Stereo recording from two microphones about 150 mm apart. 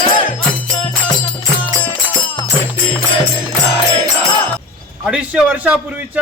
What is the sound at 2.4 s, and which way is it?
Music, 35° left (ahead or behind).